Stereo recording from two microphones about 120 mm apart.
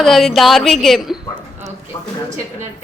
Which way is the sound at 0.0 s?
Centre (ahead or behind).